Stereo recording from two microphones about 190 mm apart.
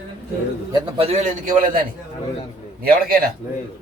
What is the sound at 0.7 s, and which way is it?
Speech, 30° right (ahead or behind).